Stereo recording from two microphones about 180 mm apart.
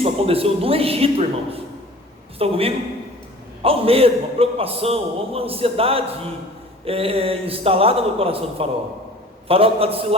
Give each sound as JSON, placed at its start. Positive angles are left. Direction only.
{"t": 0.0, "sound": "a man's voice", "side_deg": -35}